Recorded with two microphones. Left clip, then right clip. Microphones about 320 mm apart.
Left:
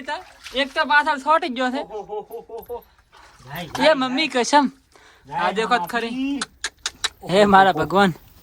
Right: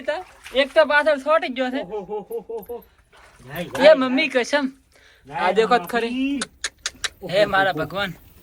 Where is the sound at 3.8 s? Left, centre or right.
Centre.